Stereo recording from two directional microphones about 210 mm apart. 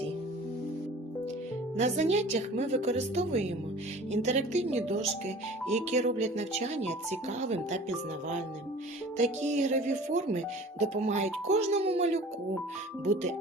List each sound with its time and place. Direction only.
1.7 s speech: 35° right (ahead or behind)
9.1 s speech: 35° right (ahead or behind)